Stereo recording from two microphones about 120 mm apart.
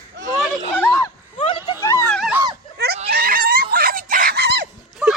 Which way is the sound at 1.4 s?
45° left (ahead or behind).